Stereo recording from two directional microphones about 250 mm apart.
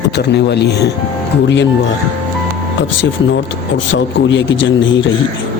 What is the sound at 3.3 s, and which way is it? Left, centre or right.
Speech, left.